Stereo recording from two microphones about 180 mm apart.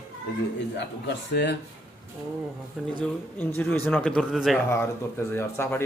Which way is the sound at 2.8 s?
Centre (ahead or behind).